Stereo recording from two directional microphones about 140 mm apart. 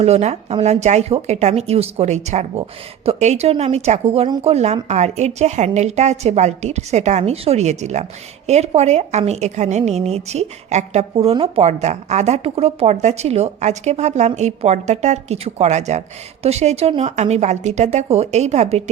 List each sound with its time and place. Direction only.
0.0 s speech: 50° right (ahead or behind)
11.7 s speech: 55° right (ahead or behind)